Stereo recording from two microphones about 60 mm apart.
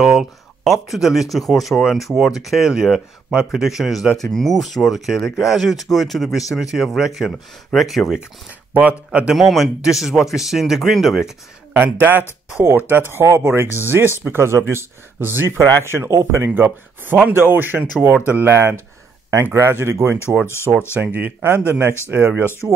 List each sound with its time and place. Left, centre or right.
0.0 s speech: centre
8.7 s speech: right
9.3 s speech: centre
11.7 s speech: right
13.2 s speech: right
13.8 s speech: right
16.4 s speech: right
20.4 s speech: left
20.9 s speech: right
22.4 s speech: left